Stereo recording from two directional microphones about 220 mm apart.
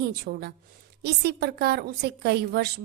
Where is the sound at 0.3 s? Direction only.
45° right (ahead or behind).